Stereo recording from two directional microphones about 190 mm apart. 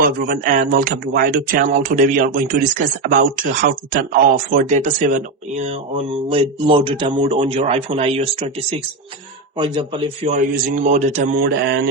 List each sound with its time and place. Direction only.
0.0 s speech: 50° right (ahead or behind)
6.3 s speech: 30° right (ahead or behind)
9.6 s speech: 25° right (ahead or behind)
10.2 s speech: 45° right (ahead or behind)
11.5 s mantra: 60° right (ahead or behind)